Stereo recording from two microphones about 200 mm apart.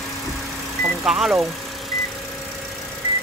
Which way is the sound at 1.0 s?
Centre (ahead or behind).